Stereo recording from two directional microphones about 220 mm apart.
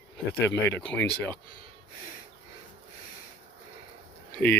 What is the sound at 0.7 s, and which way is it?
Speech, 5° left (ahead or behind).